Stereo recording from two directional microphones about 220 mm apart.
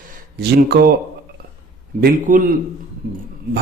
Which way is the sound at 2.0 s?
35° right (ahead or behind).